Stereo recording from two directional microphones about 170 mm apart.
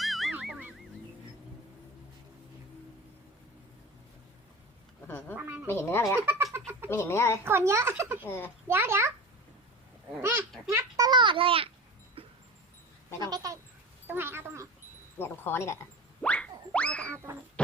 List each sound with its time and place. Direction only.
0.0 s goose: centre (ahead or behind)
5.4 s a child's voice: 10° right (ahead or behind)
5.6 s speech: 15° left (ahead or behind)
6.4 s cat: 15° right (ahead or behind)
6.9 s speech: 15° left (ahead or behind)
7.4 s a child's voice: 15° right (ahead or behind)
10.2 s a child's voice: 15° right (ahead or behind)
10.7 s a sound: 20° right (ahead or behind)
12.2 s dog: 35° right (ahead or behind)
13.2 s speech: 20° right (ahead or behind)
15.2 s speech: 15° left (ahead or behind)
16.2 s music: 5° left (ahead or behind)